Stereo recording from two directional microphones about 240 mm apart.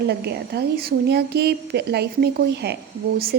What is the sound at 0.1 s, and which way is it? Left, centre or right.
A woman's voice, right.